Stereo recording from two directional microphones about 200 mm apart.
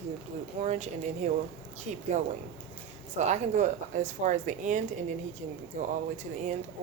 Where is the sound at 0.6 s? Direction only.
35° right (ahead or behind).